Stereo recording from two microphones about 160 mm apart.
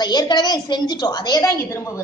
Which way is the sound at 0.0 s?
25° left (ahead or behind).